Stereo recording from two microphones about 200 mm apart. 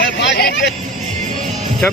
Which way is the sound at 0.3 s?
50° left (ahead or behind).